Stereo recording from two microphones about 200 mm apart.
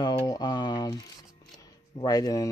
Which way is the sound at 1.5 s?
20° left (ahead or behind).